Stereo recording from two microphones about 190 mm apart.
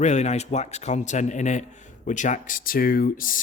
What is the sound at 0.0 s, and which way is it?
Speech, 40° left (ahead or behind).